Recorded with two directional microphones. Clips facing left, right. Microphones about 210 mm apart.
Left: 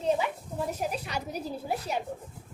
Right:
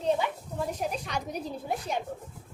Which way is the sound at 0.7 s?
5° left (ahead or behind).